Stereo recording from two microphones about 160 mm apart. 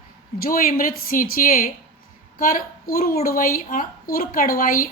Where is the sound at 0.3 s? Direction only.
65° left (ahead or behind).